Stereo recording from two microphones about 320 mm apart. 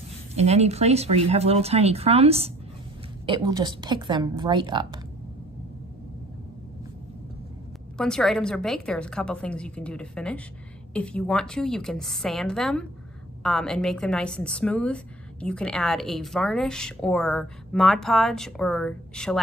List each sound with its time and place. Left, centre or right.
0.4 s a woman's voice: centre
8.0 s a woman's voice: centre